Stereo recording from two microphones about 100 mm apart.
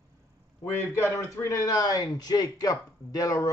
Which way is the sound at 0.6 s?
30° left (ahead or behind).